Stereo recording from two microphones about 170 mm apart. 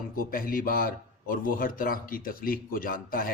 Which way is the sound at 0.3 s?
55° left (ahead or behind).